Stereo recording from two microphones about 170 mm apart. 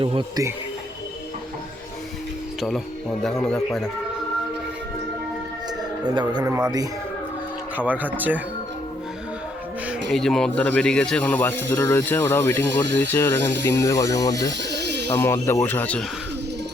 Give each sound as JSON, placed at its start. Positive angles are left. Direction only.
{"t": 0.0, "sound": "speech", "side_deg": -30}
{"t": 2.6, "sound": "speech", "side_deg": 0}
{"t": 6.1, "sound": "speech", "side_deg": -25}
{"t": 7.8, "sound": "speech", "side_deg": -10}
{"t": 10.1, "sound": "speech", "side_deg": 0}
{"t": 14.6, "sound": "a sound", "side_deg": -80}
{"t": 15.1, "sound": "speech", "side_deg": 15}